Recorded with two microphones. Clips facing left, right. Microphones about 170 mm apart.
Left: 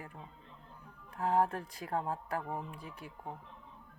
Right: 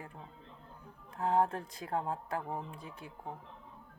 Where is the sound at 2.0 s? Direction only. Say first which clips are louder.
Even; 20° right (ahead or behind).